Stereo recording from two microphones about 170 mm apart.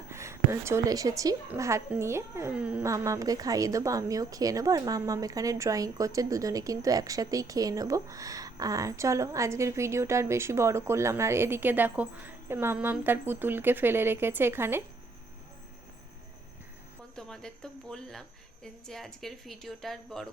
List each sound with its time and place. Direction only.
0.1 s a woman's voice: 15° right (ahead or behind)
17.2 s speech: 5° left (ahead or behind)